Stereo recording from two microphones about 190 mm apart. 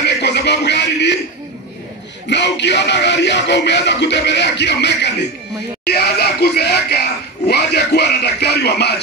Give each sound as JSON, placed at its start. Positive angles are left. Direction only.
{"t": 0.0, "sound": "speech", "side_deg": 65}
{"t": 2.2, "sound": "speech", "side_deg": 65}